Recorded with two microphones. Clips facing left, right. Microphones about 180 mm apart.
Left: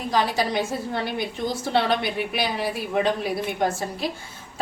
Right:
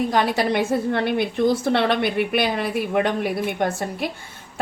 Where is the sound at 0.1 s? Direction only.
60° right (ahead or behind).